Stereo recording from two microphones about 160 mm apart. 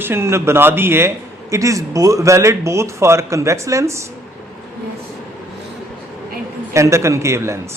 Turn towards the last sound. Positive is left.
turn(degrees=-15)  # may be behind; listen again after turning